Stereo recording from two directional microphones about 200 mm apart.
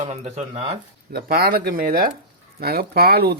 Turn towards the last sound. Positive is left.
turn(degrees=-55)  # may be behind; listen again after turning